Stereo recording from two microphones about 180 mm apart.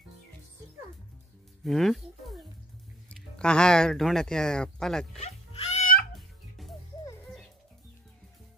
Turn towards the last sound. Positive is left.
turn(degrees=0)  # may be behind; listen again after turning